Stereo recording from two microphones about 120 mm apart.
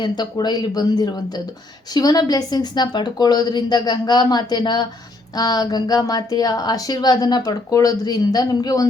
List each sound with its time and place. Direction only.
0.0 s speech: 35° left (ahead or behind)